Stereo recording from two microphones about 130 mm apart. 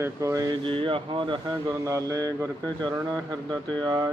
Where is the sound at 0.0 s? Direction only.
25° right (ahead or behind).